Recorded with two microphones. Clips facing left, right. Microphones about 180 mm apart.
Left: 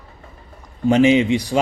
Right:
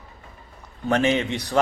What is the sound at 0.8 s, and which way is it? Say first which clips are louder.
Speech: left 7 dB; 15° left (ahead or behind).